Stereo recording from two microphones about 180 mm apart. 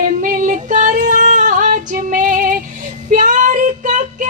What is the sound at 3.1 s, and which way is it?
Child singing, 45° right (ahead or behind).